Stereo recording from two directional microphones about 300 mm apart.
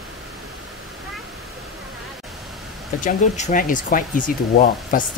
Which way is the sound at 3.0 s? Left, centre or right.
Left.